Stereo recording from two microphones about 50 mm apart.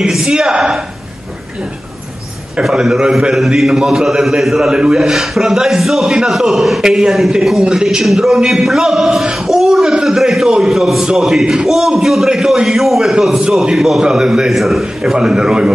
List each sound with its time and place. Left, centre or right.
0.0 s a sound: centre
0.3 s a man's voice: centre
2.8 s a man's voice: centre
4.7 s a man's voice: centre
6.8 s a man's voice: centre
14.5 s a man's voice: centre
15.1 s a man's voice: centre